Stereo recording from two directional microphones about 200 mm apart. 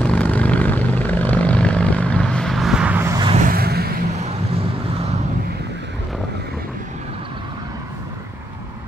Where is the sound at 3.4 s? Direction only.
50° right (ahead or behind).